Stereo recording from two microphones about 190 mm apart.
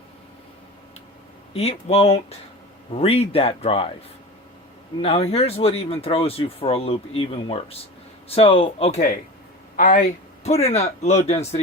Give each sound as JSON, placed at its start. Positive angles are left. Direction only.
{"t": 1.5, "sound": "speech", "side_deg": 30}
{"t": 5.0, "sound": "speech", "side_deg": 30}